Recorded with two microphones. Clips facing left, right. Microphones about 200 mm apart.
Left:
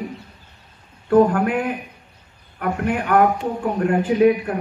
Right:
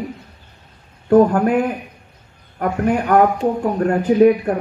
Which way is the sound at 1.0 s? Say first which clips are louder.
Right 3 dB; 40° right (ahead or behind).